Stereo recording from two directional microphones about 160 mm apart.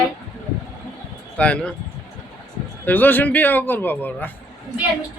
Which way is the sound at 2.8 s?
10° left (ahead or behind).